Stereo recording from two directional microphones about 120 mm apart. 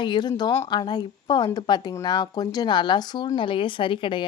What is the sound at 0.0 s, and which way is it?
Speech, 40° left (ahead or behind).